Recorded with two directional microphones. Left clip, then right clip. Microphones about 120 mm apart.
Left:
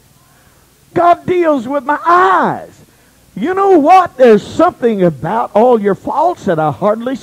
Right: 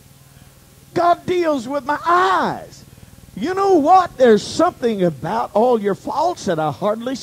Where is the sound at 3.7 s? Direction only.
60° left (ahead or behind).